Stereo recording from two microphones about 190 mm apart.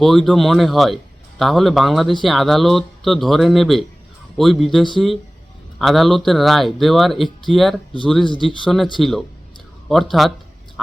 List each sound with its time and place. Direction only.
0.0 s speech: centre (ahead or behind)
8.2 s speech: 25° left (ahead or behind)
9.0 s speech: centre (ahead or behind)